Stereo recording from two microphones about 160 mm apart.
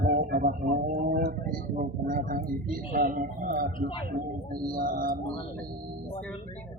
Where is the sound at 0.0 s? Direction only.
60° right (ahead or behind).